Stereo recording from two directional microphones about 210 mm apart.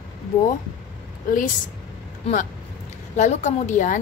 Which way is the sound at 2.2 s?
35° left (ahead or behind).